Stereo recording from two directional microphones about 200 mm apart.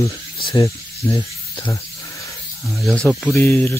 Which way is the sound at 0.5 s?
15° left (ahead or behind).